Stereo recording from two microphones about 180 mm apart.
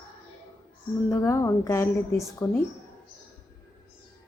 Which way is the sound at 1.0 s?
15° left (ahead or behind).